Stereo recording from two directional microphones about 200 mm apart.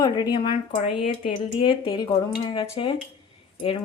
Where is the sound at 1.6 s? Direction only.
25° left (ahead or behind).